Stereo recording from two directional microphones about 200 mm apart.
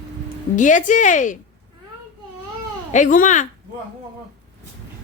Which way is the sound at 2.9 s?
40° left (ahead or behind).